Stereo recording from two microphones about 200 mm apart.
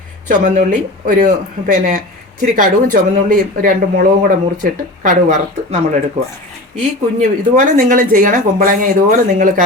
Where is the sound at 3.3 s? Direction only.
40° right (ahead or behind).